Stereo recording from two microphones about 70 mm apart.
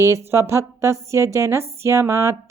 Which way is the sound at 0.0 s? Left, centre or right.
Right.